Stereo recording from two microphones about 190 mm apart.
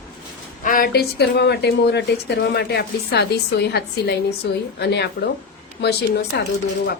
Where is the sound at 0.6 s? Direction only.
50° left (ahead or behind).